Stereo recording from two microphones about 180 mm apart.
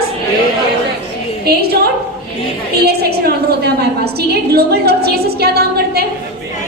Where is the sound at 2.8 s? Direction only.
60° right (ahead or behind).